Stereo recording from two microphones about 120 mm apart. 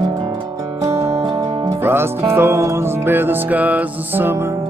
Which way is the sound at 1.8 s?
20° right (ahead or behind).